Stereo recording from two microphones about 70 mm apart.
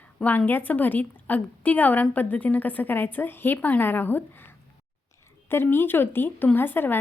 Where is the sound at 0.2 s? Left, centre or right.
Left.